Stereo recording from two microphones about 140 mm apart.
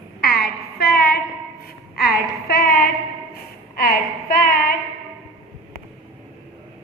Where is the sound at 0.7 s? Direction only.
90° left.